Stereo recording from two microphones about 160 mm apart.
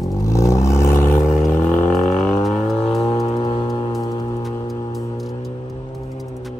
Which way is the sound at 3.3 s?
35° left (ahead or behind).